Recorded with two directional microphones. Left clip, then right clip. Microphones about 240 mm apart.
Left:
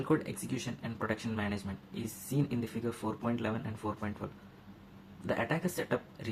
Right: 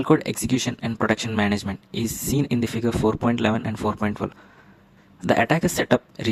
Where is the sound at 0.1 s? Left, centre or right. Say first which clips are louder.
Right 13 dB; right.